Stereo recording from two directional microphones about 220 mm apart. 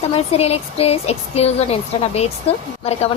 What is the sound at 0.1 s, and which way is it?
A woman's voice, 25° left (ahead or behind).